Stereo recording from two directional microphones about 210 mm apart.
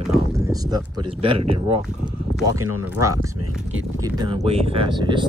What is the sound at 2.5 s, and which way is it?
Speech, 90° right.